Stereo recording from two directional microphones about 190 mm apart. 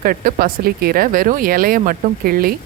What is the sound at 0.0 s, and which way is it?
Speech, 50° right (ahead or behind).